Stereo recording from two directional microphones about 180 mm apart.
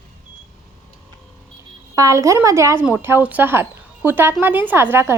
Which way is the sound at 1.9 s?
20° right (ahead or behind).